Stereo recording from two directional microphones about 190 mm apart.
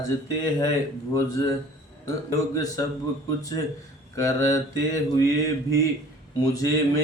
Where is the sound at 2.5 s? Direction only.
20° left (ahead or behind).